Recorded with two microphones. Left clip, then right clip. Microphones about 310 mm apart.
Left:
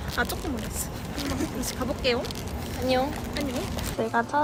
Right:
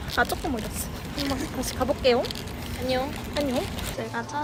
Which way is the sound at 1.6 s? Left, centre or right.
Centre.